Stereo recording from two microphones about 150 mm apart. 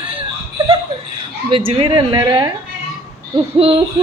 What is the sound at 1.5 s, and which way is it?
Hoot, 35° right (ahead or behind).